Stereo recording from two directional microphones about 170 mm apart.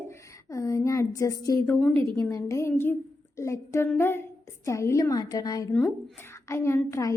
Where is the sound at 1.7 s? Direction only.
5° left (ahead or behind).